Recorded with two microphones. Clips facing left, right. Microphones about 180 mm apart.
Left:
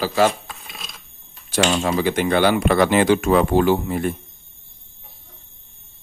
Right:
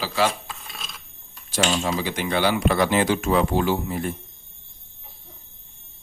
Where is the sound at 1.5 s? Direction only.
60° left (ahead or behind).